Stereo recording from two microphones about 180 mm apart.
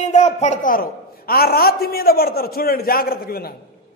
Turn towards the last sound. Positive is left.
turn(degrees=55)  # may be behind; listen again after turning